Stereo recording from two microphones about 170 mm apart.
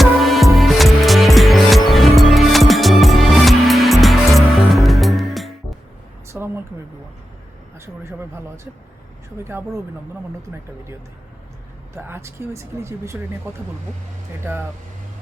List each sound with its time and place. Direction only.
0.0 s music: centre (ahead or behind)
6.2 s a sound: 15° right (ahead or behind)
8.0 s speech: 15° right (ahead or behind)
11.9 s speech: 15° right (ahead or behind)